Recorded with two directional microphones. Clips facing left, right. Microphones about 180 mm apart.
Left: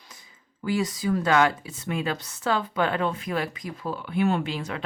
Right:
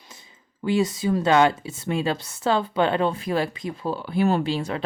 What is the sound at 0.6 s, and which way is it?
Speech, 25° right (ahead or behind).